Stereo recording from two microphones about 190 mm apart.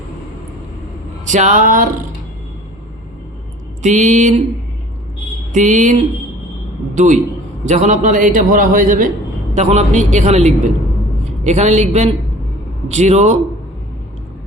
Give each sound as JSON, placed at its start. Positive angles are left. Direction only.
{"t": 1.2, "sound": "a man's voice", "side_deg": -40}
{"t": 3.8, "sound": "a man's voice", "side_deg": -40}
{"t": 5.5, "sound": "a man's voice", "side_deg": -40}